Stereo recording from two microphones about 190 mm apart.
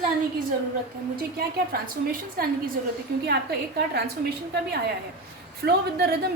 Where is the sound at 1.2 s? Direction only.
55° right (ahead or behind).